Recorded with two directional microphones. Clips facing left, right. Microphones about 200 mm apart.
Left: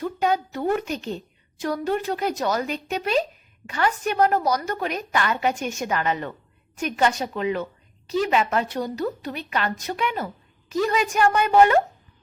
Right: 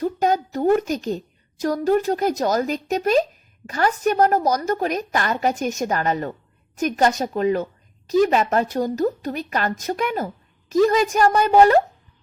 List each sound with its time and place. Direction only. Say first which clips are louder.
0.0 s a woman's voice: right 3 dB; 40° right (ahead or behind)